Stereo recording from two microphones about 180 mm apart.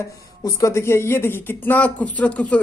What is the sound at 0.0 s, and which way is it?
Speech, 20° left (ahead or behind).